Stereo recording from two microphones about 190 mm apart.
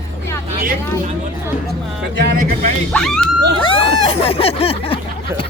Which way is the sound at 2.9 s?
5° left (ahead or behind).